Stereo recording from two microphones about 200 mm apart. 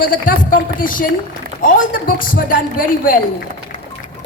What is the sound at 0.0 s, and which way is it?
A woman's voice, 45° left (ahead or behind).